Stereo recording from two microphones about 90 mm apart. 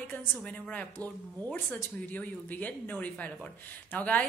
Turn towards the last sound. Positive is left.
turn(degrees=15)  # may be behind; listen again after turning